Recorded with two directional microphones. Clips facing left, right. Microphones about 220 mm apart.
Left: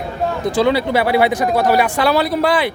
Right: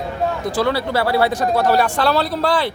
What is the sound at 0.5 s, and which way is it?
Speech, 20° left (ahead or behind).